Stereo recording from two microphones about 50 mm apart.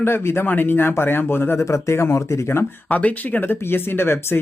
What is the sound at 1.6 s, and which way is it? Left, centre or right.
Speech, left.